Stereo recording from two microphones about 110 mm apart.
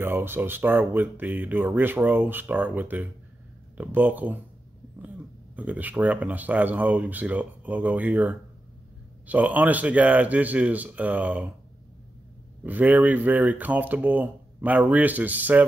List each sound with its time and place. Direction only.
0.0 s speech: 20° right (ahead or behind)
5.6 s speech: 15° right (ahead or behind)
12.6 s speech: 15° right (ahead or behind)